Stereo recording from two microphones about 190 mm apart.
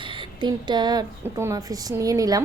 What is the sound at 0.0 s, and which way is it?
A woman's voice, 25° right (ahead or behind).